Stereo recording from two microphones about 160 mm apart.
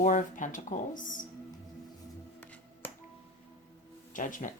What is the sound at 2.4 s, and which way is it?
Finger snapping, 10° left (ahead or behind).